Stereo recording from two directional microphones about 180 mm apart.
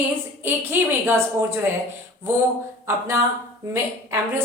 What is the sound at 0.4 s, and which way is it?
Speech, 15° right (ahead or behind).